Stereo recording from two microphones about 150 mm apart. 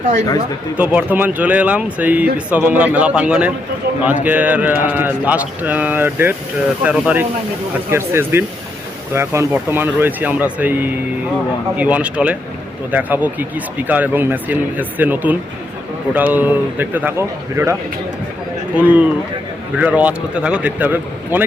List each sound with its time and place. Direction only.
0.8 s speech: 10° right (ahead or behind)
18.8 s speech: 10° right (ahead or behind)